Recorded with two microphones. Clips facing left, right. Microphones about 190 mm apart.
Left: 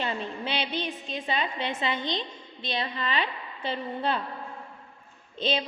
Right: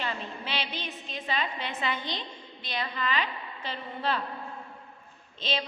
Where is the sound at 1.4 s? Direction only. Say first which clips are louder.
Left 2 dB; 25° left (ahead or behind).